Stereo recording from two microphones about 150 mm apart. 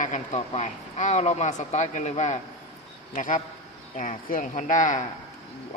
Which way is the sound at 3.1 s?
60° left (ahead or behind).